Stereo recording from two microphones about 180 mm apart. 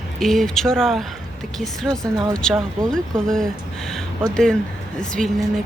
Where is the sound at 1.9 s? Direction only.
20° right (ahead or behind).